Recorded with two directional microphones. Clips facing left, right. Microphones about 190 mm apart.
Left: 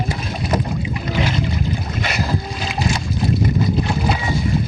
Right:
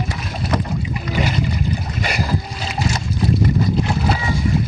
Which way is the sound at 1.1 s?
5° right (ahead or behind).